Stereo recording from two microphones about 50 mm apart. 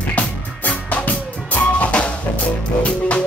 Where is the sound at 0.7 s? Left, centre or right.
Left.